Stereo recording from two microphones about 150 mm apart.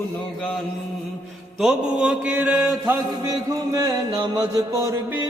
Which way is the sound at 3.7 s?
25° right (ahead or behind).